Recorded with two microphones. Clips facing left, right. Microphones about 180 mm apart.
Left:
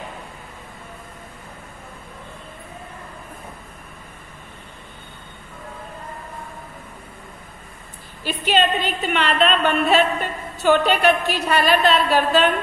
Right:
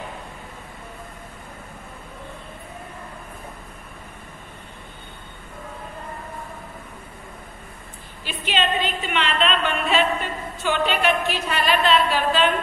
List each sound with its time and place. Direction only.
8.2 s a woman's voice: 40° left (ahead or behind)